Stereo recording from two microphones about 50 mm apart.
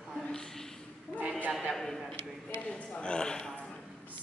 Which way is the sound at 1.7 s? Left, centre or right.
Centre.